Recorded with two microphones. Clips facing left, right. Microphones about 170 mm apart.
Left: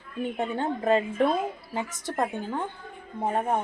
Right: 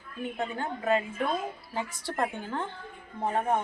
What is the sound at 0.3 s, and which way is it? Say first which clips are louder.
A woman's voice: left 5 dB; 30° left (ahead or behind).